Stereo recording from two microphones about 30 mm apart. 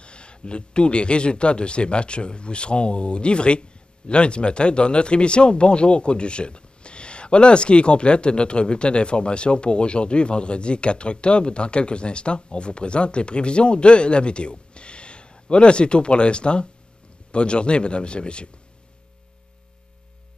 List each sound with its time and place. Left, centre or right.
0.0 s speech: left